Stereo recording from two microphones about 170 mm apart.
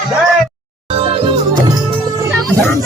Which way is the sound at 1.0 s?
35° right (ahead or behind).